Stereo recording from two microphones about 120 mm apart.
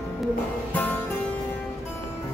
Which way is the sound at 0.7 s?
15° left (ahead or behind).